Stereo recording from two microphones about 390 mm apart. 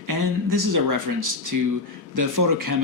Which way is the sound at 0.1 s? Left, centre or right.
Right.